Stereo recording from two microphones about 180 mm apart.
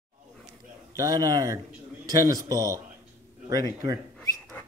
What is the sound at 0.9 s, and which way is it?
Speech, 20° right (ahead or behind).